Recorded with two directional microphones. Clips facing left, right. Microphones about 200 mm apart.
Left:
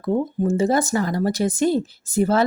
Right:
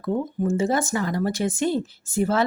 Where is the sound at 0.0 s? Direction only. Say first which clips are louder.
Left 3 dB; 35° left (ahead or behind).